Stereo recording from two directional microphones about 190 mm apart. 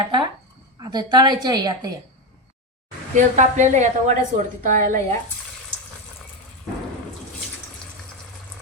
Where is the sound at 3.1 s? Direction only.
40° right (ahead or behind).